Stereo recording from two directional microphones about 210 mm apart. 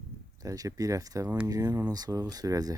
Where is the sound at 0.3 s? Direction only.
15° right (ahead or behind).